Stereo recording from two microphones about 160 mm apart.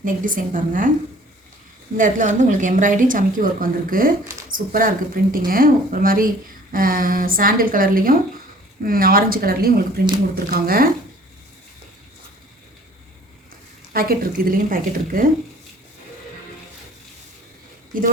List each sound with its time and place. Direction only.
0.0 s a woman's voice: 55° right (ahead or behind)
2.0 s a woman's voice: 55° right (ahead or behind)
13.9 s a woman's voice: 65° right (ahead or behind)
17.9 s a woman's voice: 60° right (ahead or behind)